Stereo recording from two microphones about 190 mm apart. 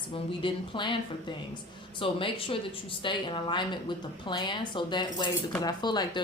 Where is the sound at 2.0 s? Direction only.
25° left (ahead or behind).